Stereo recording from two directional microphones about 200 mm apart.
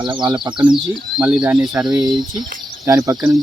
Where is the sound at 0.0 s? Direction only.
20° right (ahead or behind).